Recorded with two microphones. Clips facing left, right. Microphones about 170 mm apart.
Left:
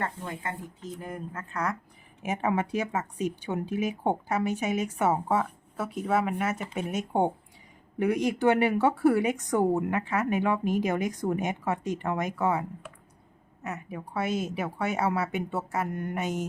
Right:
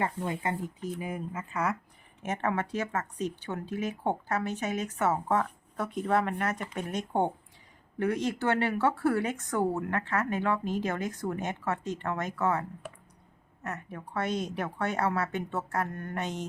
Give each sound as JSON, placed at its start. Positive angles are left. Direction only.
{"t": 0.0, "sound": "speech", "side_deg": -15}
{"t": 2.2, "sound": "speech", "side_deg": 10}